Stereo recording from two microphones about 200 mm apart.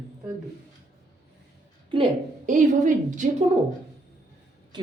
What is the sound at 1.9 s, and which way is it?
Speech, 25° right (ahead or behind).